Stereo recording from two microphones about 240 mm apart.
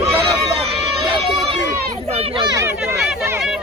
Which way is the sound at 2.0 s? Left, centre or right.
Right.